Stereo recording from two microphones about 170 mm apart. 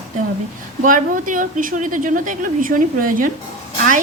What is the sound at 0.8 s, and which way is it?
A woman's voice, 50° right (ahead or behind).